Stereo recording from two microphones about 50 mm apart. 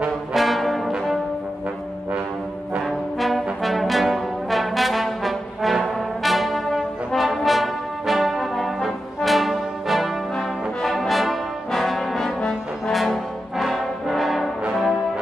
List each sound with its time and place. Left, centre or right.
0.3 s brass instrument: centre
2.8 s brass instrument: centre
12.4 s brass instrument: centre
12.9 s brass instrument: centre